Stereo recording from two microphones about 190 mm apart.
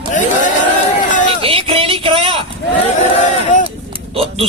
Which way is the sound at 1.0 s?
40° left (ahead or behind).